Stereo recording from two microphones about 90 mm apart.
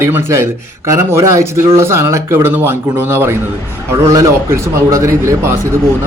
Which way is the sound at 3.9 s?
35° right (ahead or behind).